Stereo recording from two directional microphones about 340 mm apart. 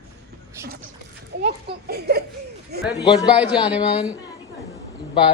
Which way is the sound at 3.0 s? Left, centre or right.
Centre.